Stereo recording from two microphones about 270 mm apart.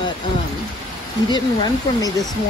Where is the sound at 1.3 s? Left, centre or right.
Centre.